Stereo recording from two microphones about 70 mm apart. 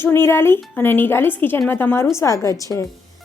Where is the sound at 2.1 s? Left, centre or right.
Left.